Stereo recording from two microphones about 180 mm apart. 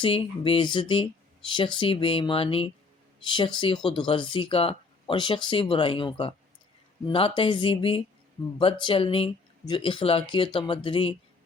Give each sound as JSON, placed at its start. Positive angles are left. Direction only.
{"t": 0.0, "sound": "speech", "side_deg": 30}